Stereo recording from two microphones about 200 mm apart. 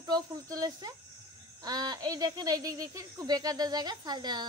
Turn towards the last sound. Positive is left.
turn(degrees=-20)  # may be behind; listen again after turning